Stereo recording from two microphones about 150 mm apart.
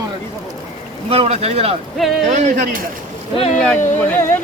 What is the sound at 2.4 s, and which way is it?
Speech, 60° right (ahead or behind).